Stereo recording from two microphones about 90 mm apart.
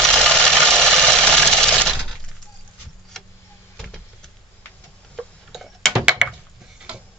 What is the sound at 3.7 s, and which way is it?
Power windows, 5° left (ahead or behind).